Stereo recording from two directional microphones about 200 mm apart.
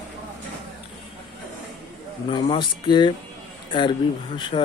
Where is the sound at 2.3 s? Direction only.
25° left (ahead or behind).